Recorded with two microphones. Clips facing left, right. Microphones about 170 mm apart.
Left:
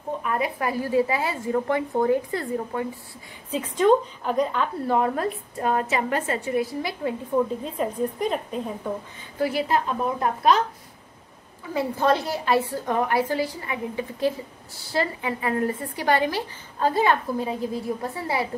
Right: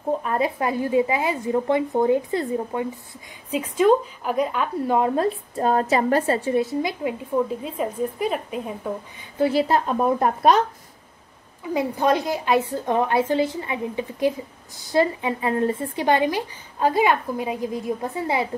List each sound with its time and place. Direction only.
0.2 s speech: 30° right (ahead or behind)
7.3 s a woman's voice: 5° right (ahead or behind)
9.4 s speech: 30° right (ahead or behind)
9.8 s speech: 45° right (ahead or behind)
11.7 s speech: 15° right (ahead or behind)